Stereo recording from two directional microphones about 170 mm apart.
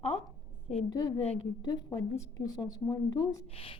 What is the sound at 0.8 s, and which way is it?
A woman's voice, 25° left (ahead or behind).